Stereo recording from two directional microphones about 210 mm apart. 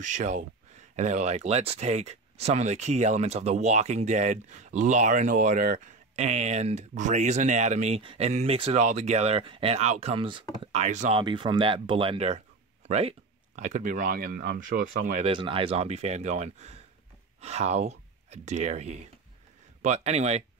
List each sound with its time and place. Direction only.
0.0 s speech: 35° right (ahead or behind)
15.3 s speech: 25° right (ahead or behind)